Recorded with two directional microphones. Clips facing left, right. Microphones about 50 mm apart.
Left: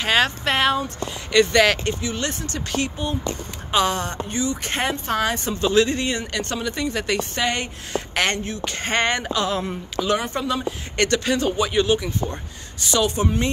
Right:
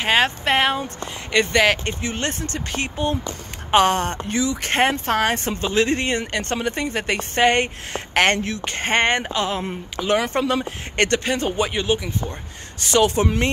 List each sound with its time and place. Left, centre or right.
0.0 s speech: centre
2.0 s speech: right
3.7 s speech: right
4.3 s speech: right
5.6 s speech: right
5.9 s a woman's voice: right
7.4 s speech: right
8.6 s a woman's voice: right
10.1 s a woman's voice: right
11.7 s speech: centre
12.8 s speech: right